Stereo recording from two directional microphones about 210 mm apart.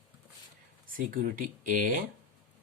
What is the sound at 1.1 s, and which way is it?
Speech, 40° right (ahead or behind).